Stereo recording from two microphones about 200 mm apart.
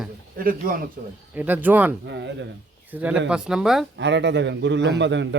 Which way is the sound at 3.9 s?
60° right (ahead or behind).